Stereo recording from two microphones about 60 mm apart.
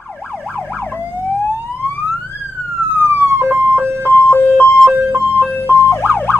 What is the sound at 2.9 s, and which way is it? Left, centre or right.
Emergency vehicle, right.